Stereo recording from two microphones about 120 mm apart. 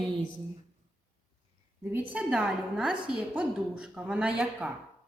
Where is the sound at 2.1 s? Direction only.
5° right (ahead or behind).